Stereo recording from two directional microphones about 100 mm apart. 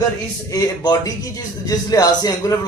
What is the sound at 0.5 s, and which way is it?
A man's voice, 40° left (ahead or behind).